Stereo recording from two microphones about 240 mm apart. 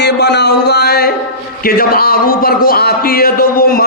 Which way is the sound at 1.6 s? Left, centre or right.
Left.